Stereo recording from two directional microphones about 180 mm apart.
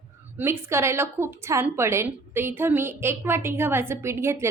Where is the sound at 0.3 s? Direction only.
15° right (ahead or behind).